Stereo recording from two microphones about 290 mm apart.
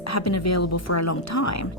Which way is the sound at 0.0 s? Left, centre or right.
Left.